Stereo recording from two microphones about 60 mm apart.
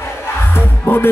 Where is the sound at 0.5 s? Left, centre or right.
Left.